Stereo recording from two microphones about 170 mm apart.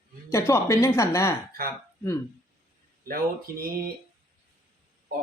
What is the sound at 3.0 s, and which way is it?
Speech, 60° right (ahead or behind).